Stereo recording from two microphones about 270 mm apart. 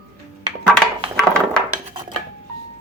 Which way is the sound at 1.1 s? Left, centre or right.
Centre.